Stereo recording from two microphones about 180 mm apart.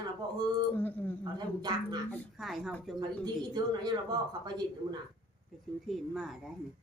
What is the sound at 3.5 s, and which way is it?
Speech, 25° right (ahead or behind).